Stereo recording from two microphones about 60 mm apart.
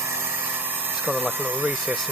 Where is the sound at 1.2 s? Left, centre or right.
Right.